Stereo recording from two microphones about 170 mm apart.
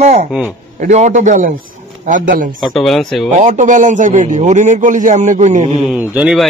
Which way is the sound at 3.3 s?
45° right (ahead or behind).